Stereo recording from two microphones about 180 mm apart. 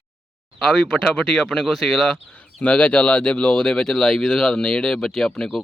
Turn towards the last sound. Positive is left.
turn(degrees=5)  # may be behind; listen again after turning